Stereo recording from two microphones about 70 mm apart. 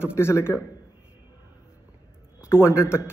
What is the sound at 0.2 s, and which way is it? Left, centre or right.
Speech, left.